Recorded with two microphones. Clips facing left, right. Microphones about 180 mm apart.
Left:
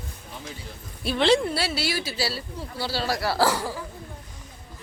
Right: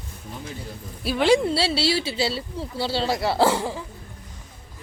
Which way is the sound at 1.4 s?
25° right (ahead or behind).